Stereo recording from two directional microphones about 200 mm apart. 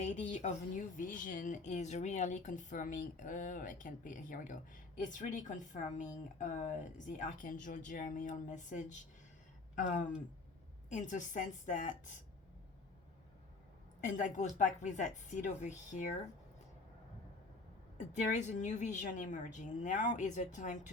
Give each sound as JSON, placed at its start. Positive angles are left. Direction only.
{"t": 0.0, "sound": "speech", "side_deg": 35}
{"t": 14.0, "sound": "speech", "side_deg": 40}
{"t": 17.9, "sound": "speech", "side_deg": 35}